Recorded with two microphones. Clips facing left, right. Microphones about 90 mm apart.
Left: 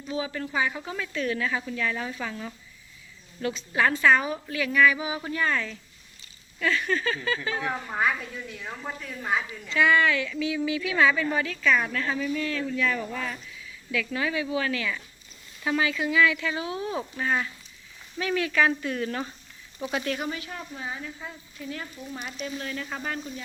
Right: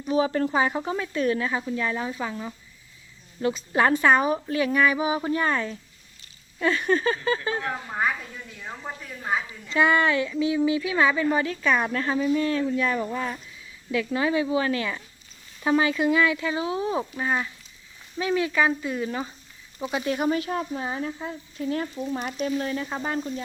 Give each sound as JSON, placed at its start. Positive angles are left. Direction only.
{"t": 0.2, "sound": "a woman's voice", "side_deg": -40}
{"t": 8.6, "sound": "speech", "side_deg": -10}
{"t": 9.7, "sound": "a woman's voice", "side_deg": -35}
{"t": 20.2, "sound": "speech", "side_deg": -40}
{"t": 22.6, "sound": "a woman's voice", "side_deg": -25}